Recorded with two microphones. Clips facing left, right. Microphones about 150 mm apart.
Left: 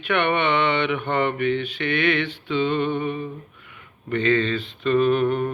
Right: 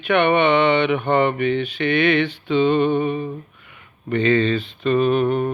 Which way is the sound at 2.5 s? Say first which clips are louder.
Right 5 dB; 20° right (ahead or behind).